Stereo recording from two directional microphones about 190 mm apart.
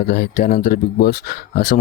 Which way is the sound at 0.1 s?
50° left (ahead or behind).